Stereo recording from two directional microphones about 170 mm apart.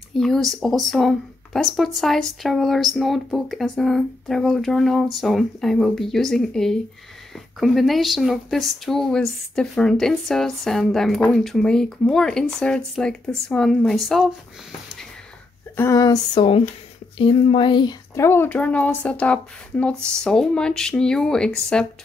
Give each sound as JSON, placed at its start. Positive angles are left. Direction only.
{"t": 0.2, "sound": "speech", "side_deg": 0}
{"t": 15.7, "sound": "a sound", "side_deg": 15}
{"t": 17.2, "sound": "speech", "side_deg": 30}
{"t": 18.1, "sound": "speech", "side_deg": 15}